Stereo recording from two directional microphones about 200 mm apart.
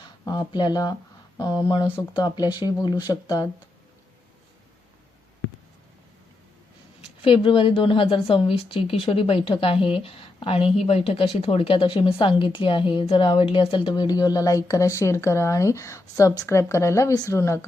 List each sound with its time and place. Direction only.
0.3 s a woman's voice: 20° left (ahead or behind)
7.2 s a woman's voice: 25° left (ahead or behind)